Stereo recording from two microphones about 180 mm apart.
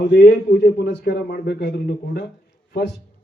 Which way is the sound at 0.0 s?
60° left (ahead or behind).